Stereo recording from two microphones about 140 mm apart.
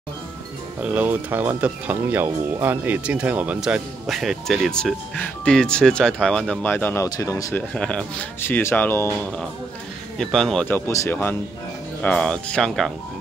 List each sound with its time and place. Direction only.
0.8 s speech: 10° right (ahead or behind); by 7.1 s 15° left (ahead or behind)
7.1 s speech: 25° left (ahead or behind)
7.5 s speech: 5° left (ahead or behind)
10.1 s speech: centre (ahead or behind)
10.9 s speech: 20° left (ahead or behind); by 12.9 s 5° left (ahead or behind)